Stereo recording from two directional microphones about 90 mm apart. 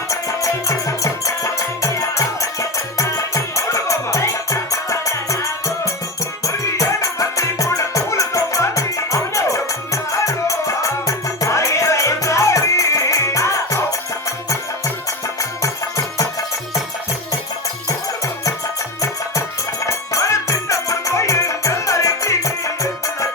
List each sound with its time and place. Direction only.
0.1 s music: 35° left (ahead or behind)
19.0 s music: 35° left (ahead or behind)